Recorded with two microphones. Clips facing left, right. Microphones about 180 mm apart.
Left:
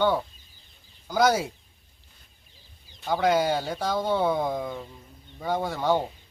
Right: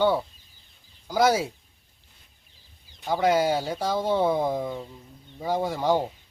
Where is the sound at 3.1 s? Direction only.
5° right (ahead or behind).